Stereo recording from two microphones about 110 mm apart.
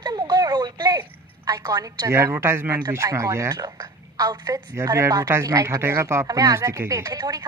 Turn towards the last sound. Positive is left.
turn(degrees=-35)  # may be behind; listen again after turning